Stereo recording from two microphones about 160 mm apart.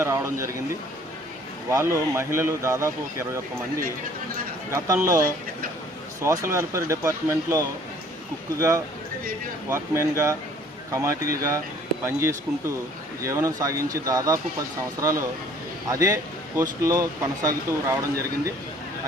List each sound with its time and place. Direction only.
0.0 s speech: 20° right (ahead or behind)
1.7 s speech: 15° right (ahead or behind)
4.7 s speech: 20° right (ahead or behind)
6.2 s speech: 20° right (ahead or behind)
9.6 s speech: 15° right (ahead or behind)